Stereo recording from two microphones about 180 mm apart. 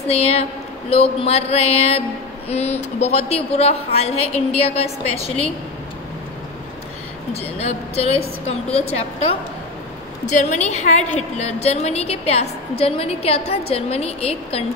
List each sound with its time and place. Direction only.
0.0 s a woman's voice: 35° left (ahead or behind)
7.3 s a woman's voice: 35° left (ahead or behind)